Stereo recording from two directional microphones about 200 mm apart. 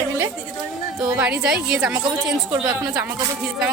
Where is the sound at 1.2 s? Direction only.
5° right (ahead or behind).